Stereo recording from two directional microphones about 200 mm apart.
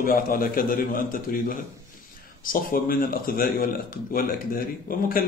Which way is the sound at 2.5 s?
45° left (ahead or behind).